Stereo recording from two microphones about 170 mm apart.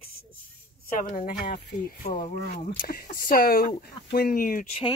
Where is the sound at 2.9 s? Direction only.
55° left (ahead or behind).